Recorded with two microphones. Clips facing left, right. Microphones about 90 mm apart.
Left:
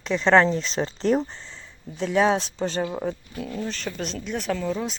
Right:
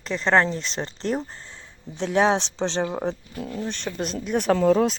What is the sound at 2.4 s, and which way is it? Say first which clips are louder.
Speech: right 1 dB; 90° right.